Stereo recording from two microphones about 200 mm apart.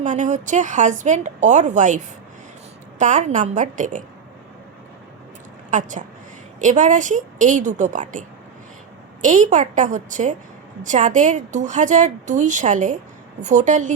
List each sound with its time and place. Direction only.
0.0 s speech: 40° right (ahead or behind)
3.0 s speech: 40° right (ahead or behind)
5.7 s speech: 40° right (ahead or behind)
9.2 s speech: 40° right (ahead or behind)